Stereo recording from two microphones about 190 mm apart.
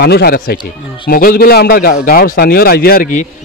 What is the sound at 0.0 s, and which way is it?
Speech, 55° left (ahead or behind).